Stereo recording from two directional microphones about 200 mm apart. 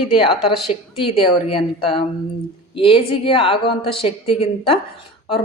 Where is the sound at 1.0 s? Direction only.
25° left (ahead or behind).